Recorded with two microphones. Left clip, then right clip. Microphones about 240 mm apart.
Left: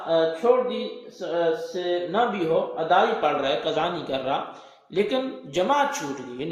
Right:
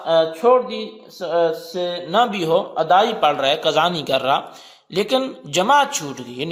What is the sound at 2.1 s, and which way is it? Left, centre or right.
Speech, right.